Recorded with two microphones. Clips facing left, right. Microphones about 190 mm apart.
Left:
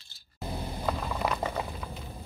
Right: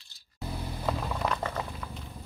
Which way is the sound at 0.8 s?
5° left (ahead or behind).